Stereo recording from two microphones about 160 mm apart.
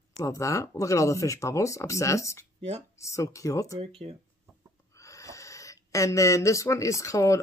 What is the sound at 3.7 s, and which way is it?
Speech, 40° right (ahead or behind).